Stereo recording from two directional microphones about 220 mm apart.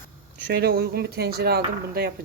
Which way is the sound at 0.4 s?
45° right (ahead or behind).